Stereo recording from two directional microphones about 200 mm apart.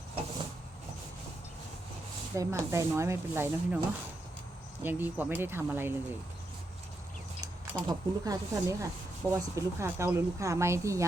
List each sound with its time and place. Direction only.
2.3 s a woman's voice: 15° right (ahead or behind)
4.8 s a woman's voice: 10° right (ahead or behind)
7.4 s a woman's voice: 15° right (ahead or behind)